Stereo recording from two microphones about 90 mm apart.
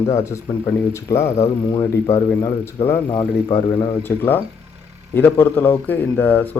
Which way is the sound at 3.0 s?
55° left (ahead or behind).